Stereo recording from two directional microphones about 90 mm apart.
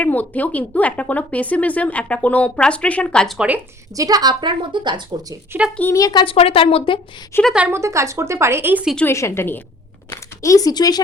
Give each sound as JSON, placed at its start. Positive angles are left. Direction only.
{"t": 0.0, "sound": "speech", "side_deg": 20}
{"t": 3.3, "sound": "speech", "side_deg": -15}
{"t": 3.9, "sound": "speech", "side_deg": -45}
{"t": 5.5, "sound": "speech", "side_deg": -25}
{"t": 5.9, "sound": "speech", "side_deg": 45}
{"t": 6.2, "sound": "speech", "side_deg": 90}
{"t": 7.3, "sound": "a woman's voice", "side_deg": 25}
{"t": 7.7, "sound": "speech", "side_deg": -35}
{"t": 9.0, "sound": "a woman's voice", "side_deg": 30}
{"t": 10.1, "sound": "speech", "side_deg": 40}